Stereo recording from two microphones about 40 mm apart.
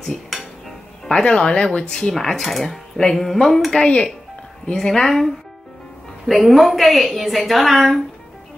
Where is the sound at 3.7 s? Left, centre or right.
Left.